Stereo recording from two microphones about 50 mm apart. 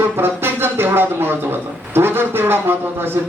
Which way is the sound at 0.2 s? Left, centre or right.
Right.